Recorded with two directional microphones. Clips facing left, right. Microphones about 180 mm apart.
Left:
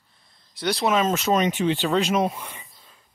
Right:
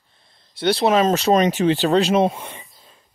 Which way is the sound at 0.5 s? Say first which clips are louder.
Right 5 dB; 30° right (ahead or behind).